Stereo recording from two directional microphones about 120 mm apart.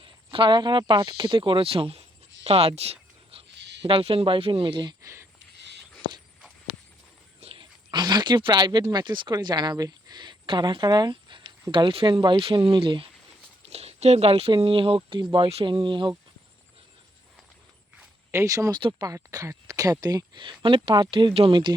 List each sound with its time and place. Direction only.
0.0 s speech: 45° right (ahead or behind)
5.0 s a sound: 25° right (ahead or behind)
7.4 s a sound: 50° right (ahead or behind)
7.9 s speech: 35° right (ahead or behind)
13.7 s speech: 60° right (ahead or behind); by 16.1 s 40° right (ahead or behind)
18.3 s speech: 25° right (ahead or behind); by 21.8 s 40° right (ahead or behind)